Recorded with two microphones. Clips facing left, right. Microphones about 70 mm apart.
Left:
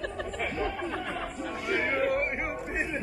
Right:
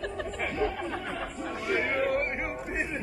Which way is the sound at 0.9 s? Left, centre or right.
Right.